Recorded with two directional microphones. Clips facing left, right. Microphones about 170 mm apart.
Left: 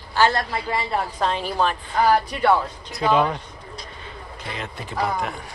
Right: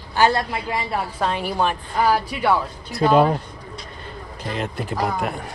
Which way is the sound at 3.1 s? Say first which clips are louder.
Right 5 dB; 45° right (ahead or behind).